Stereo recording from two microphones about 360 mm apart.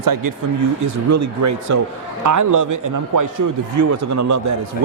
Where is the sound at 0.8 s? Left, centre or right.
Right.